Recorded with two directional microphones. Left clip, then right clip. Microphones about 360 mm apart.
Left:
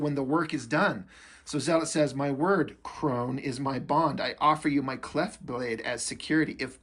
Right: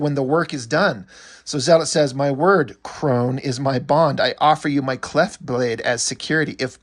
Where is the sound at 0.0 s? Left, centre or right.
Centre.